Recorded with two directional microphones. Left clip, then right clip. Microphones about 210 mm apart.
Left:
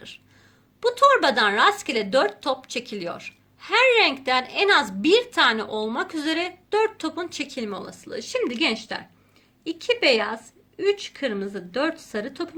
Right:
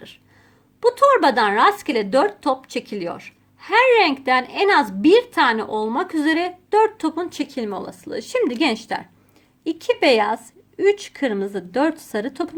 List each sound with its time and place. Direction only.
0.8 s a woman's voice: 45° right (ahead or behind)